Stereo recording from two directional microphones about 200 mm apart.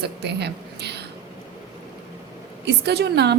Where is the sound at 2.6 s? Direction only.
55° right (ahead or behind).